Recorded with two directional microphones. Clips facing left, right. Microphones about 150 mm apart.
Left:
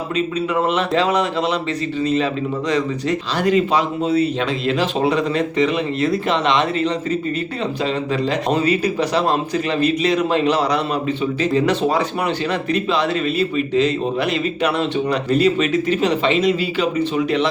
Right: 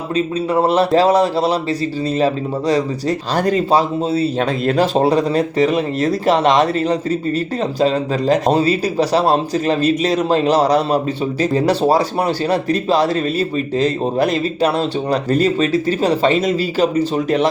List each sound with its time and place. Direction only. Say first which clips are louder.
0.5 s a man's voice: right 6 dB; 35° right (ahead or behind)
4.6 s a man's voice: right 5 dB; 45° right (ahead or behind)